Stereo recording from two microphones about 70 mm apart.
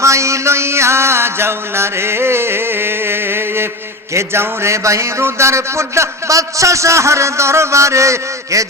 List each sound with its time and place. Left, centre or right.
0.0 s music: right
4.1 s speech: right